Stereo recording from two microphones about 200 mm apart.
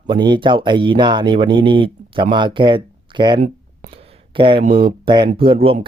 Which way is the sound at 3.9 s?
25° right (ahead or behind).